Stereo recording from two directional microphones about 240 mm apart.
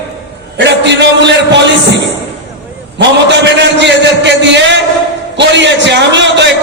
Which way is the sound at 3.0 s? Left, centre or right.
Right.